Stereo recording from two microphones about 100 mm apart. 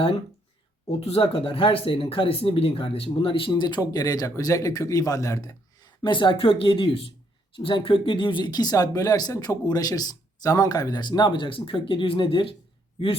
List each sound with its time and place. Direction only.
0.9 s speech: 75° left (ahead or behind); by 12.5 s 55° left (ahead or behind)